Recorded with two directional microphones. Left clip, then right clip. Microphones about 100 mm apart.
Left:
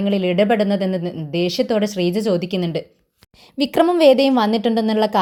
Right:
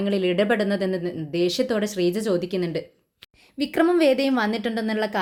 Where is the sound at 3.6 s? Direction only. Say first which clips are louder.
Left 7 dB; 90° left.